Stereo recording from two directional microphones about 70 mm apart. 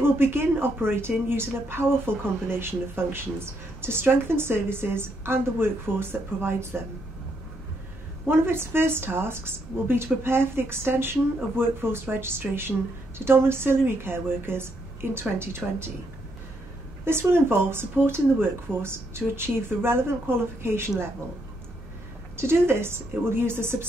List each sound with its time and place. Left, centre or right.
0.0 s a woman's voice: right
8.3 s a woman's voice: right
17.0 s a woman's voice: right
22.4 s a woman's voice: right